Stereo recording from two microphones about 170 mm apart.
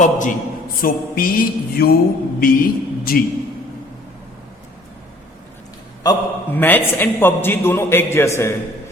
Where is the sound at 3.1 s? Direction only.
60° left (ahead or behind).